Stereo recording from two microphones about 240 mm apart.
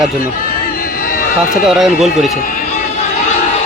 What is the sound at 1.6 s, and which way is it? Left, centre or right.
Speech, centre.